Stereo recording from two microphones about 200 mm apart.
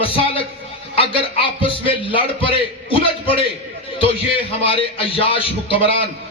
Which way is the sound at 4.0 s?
25° left (ahead or behind).